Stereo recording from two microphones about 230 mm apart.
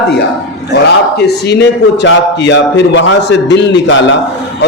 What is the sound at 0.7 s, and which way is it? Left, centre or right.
A man's voice, left.